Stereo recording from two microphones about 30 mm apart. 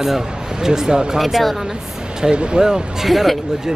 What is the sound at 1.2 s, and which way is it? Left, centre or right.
Speech, centre.